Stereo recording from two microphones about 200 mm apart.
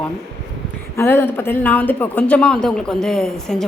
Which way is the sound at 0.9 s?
10° left (ahead or behind).